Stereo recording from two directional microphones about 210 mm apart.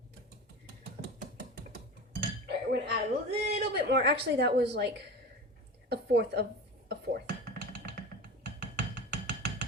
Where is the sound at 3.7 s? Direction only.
55° right (ahead or behind).